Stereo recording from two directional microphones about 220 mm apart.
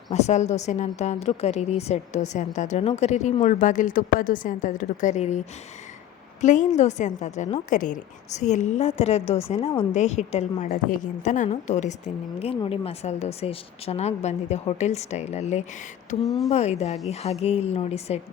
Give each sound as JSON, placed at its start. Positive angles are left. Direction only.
{"t": 0.1, "sound": "a woman's voice", "side_deg": 30}
{"t": 6.4, "sound": "a woman's voice", "side_deg": 35}
{"t": 16.2, "sound": "speech", "side_deg": 0}
{"t": 16.5, "sound": "speech", "side_deg": 30}